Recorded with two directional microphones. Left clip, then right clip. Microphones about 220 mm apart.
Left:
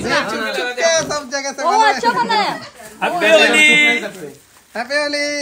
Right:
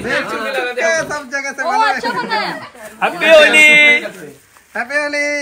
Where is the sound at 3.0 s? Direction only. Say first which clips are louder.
Right 3 dB; centre (ahead or behind).